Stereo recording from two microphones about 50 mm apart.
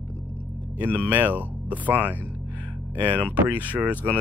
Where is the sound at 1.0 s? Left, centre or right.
Right.